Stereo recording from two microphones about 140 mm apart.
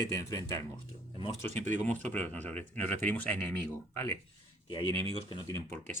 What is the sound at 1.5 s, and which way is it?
Speech, 55° right (ahead or behind).